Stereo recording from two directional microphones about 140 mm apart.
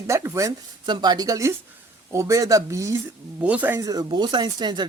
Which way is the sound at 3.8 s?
25° right (ahead or behind).